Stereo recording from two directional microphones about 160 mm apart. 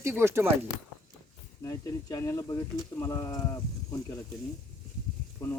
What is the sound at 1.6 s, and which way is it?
Speech, 20° left (ahead or behind).